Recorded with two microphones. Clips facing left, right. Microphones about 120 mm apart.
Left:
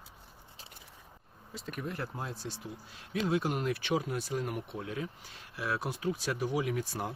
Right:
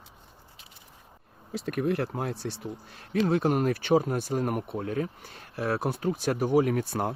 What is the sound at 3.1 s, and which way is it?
Speech, 45° right (ahead or behind).